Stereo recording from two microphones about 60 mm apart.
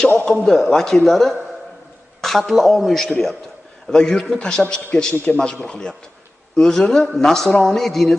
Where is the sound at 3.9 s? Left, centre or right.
Centre.